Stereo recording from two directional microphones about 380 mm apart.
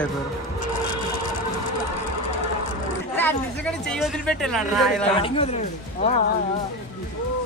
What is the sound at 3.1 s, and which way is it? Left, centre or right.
Speech, centre.